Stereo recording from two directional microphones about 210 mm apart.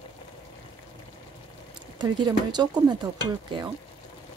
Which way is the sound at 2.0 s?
20° right (ahead or behind).